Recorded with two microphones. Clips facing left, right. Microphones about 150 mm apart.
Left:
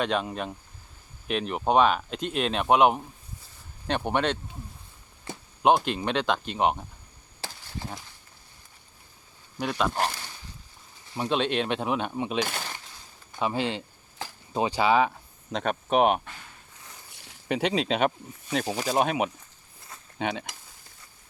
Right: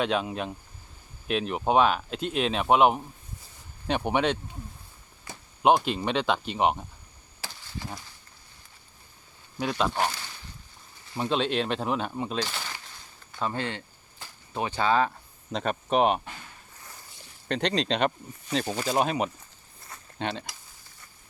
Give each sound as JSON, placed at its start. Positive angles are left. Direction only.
{"t": 0.0, "sound": "speech", "side_deg": -5}
{"t": 5.6, "sound": "speech", "side_deg": -5}
{"t": 9.6, "sound": "speech", "side_deg": 0}
{"t": 11.1, "sound": "speech", "side_deg": 0}
{"t": 12.4, "sound": "speech", "side_deg": 55}
{"t": 13.4, "sound": "speech", "side_deg": 15}
{"t": 17.5, "sound": "speech", "side_deg": 5}
{"t": 19.9, "sound": "a sound", "side_deg": 5}